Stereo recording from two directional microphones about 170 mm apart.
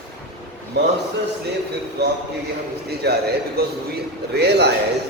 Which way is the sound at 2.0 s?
75° right (ahead or behind).